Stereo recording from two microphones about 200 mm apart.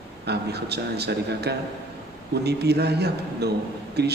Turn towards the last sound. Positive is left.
turn(degrees=-55)  # may be behind; listen again after turning